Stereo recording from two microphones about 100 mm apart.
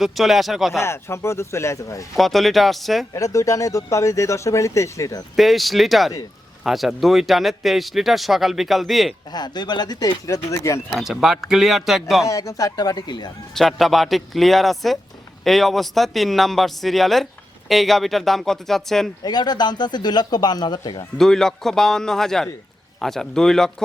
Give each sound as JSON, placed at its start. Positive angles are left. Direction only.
{"t": 0.0, "sound": "speech", "side_deg": 0}
{"t": 0.8, "sound": "speech", "side_deg": 25}
{"t": 2.1, "sound": "speech", "side_deg": 0}
{"t": 3.1, "sound": "speech", "side_deg": 35}
{"t": 5.4, "sound": "speech", "side_deg": 0}
{"t": 9.3, "sound": "speech", "side_deg": 45}
{"t": 10.9, "sound": "speech", "side_deg": -5}
{"t": 12.2, "sound": "speech", "side_deg": 35}
{"t": 13.5, "sound": "speech", "side_deg": 0}
{"t": 19.2, "sound": "speech", "side_deg": 45}
{"t": 21.2, "sound": "speech", "side_deg": 5}